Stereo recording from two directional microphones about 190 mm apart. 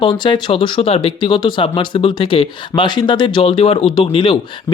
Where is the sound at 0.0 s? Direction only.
25° left (ahead or behind).